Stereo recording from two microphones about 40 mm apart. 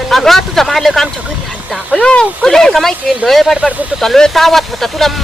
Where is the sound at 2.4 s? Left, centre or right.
Centre.